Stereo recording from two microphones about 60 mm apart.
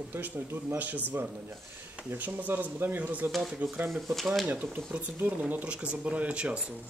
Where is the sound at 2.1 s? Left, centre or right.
Right.